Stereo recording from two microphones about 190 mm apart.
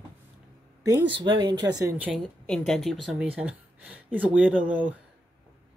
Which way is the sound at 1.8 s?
10° right (ahead or behind).